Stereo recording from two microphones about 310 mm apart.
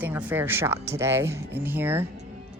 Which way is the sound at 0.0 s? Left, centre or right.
Centre.